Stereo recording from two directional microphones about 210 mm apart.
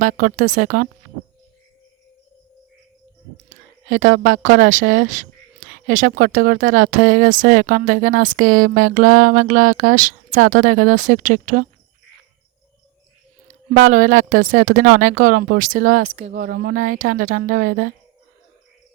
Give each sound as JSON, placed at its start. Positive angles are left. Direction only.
{"t": 0.0, "sound": "speech", "side_deg": -40}
{"t": 4.4, "sound": "speech", "side_deg": -40}
{"t": 13.5, "sound": "speech", "side_deg": -40}